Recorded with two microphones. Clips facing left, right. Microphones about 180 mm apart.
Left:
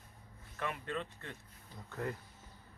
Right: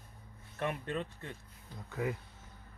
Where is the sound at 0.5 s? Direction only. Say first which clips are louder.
Right 3 dB; 20° right (ahead or behind).